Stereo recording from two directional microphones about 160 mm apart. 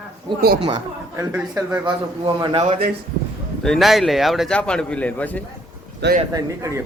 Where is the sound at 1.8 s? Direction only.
30° right (ahead or behind).